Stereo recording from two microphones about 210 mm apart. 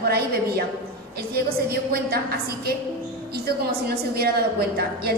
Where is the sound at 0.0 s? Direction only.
50° right (ahead or behind).